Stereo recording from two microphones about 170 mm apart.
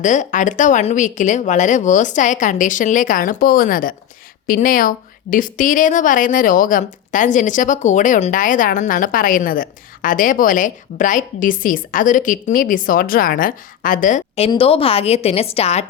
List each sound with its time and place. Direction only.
0.0 s a woman's voice: 50° left (ahead or behind)